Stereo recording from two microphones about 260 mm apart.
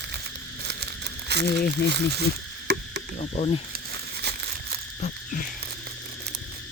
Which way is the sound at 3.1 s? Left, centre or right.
Left.